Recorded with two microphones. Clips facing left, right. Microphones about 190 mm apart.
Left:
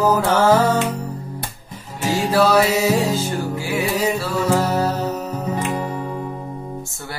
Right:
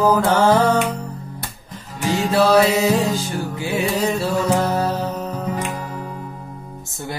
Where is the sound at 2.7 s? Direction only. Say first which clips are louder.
Even; 10° left (ahead or behind).